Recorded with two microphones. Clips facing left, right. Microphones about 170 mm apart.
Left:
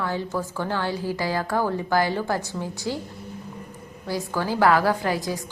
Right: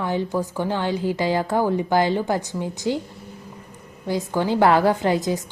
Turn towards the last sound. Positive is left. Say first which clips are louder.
# right 5 dB
turn(degrees=-20)  # may be behind; listen again after turning